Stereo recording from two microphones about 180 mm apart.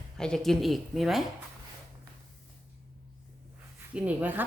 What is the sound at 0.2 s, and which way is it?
A woman's voice, 5° left (ahead or behind).